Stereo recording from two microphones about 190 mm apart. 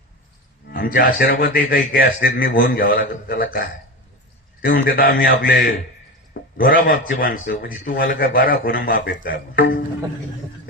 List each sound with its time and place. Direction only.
0.7 s a man's voice: 50° left (ahead or behind)
4.6 s a man's voice: 50° left (ahead or behind)